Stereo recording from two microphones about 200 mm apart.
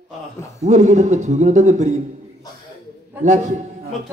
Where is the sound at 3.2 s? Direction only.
35° right (ahead or behind).